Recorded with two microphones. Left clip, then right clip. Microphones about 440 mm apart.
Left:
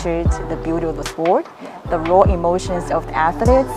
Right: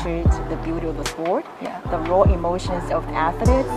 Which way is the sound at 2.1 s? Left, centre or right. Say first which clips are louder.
Left 5 dB; left.